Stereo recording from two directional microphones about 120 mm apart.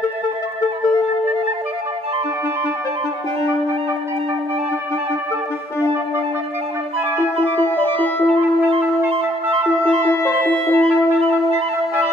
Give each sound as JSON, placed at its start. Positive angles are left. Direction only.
{"t": 7.2, "sound": "music", "side_deg": 20}
{"t": 8.6, "sound": "music", "side_deg": -55}
{"t": 10.0, "sound": "music", "side_deg": 15}